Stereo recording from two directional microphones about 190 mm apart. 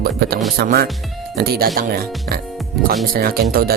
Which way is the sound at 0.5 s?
55° right (ahead or behind).